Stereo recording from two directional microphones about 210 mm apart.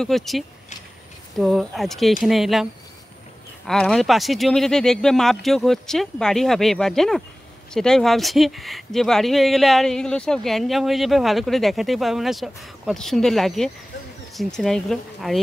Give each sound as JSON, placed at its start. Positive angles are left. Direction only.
{"t": 0.0, "sound": "speech", "side_deg": 0}